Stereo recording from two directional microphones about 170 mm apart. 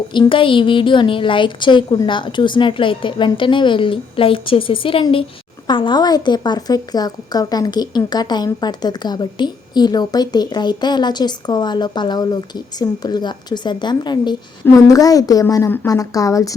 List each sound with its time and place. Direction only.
0.1 s speech: 30° left (ahead or behind)